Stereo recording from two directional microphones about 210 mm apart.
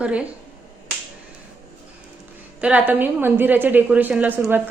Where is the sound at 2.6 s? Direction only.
5° right (ahead or behind).